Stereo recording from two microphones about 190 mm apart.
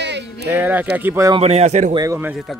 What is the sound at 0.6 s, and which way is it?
Speech, 10° right (ahead or behind).